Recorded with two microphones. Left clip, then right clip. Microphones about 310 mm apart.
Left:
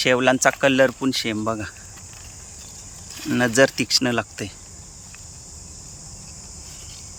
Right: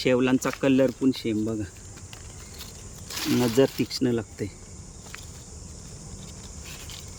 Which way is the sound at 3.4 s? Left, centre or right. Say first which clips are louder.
Left 6 dB; centre.